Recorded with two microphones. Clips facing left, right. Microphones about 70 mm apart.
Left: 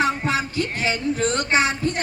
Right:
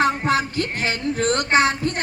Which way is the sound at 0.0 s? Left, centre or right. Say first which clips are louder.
Right 2 dB; right.